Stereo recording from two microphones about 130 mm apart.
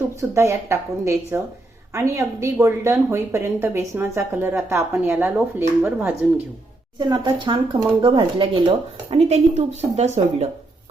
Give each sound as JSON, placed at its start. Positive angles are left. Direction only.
{"t": 0.2, "sound": "speech", "side_deg": -20}
{"t": 7.0, "sound": "speech", "side_deg": -35}
{"t": 9.1, "sound": "a woman's voice", "side_deg": -55}